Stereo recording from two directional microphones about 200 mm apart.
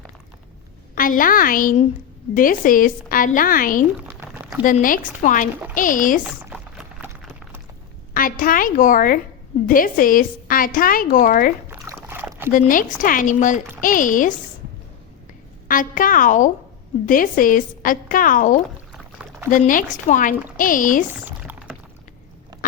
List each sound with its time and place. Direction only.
0.9 s a woman's voice: 45° left (ahead or behind)
4.0 s a sound: 5° right (ahead or behind)
4.6 s speech: 40° left (ahead or behind)
6.2 s a sound: 5° right (ahead or behind)
8.1 s a woman's voice: 45° left (ahead or behind)
11.7 s rowboat: 10° right (ahead or behind)
12.5 s speech: 40° left (ahead or behind)
15.6 s a woman's voice: 45° left (ahead or behind)
18.9 s pour: 5° right (ahead or behind)
19.5 s a woman's voice: 40° left (ahead or behind)
21.1 s typing: 5° right (ahead or behind)